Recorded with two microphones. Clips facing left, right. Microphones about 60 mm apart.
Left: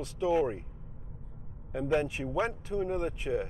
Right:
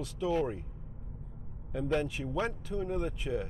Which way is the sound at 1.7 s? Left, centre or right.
Centre.